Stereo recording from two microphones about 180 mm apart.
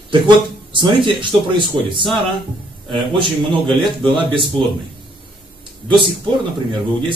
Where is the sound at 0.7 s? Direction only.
25° right (ahead or behind).